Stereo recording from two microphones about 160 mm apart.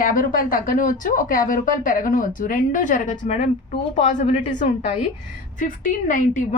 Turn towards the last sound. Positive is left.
turn(degrees=55)  # may be behind; listen again after turning